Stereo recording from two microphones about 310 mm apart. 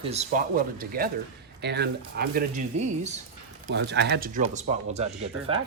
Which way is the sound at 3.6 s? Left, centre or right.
Right.